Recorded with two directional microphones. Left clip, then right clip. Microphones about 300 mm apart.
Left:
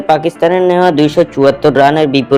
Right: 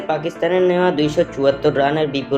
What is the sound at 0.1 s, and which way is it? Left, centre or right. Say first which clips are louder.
Speech: left 9 dB; left.